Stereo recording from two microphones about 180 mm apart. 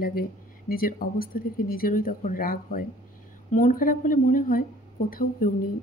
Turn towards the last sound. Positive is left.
turn(degrees=50)  # may be behind; listen again after turning